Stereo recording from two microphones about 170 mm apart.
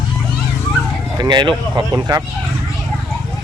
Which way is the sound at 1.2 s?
25° right (ahead or behind).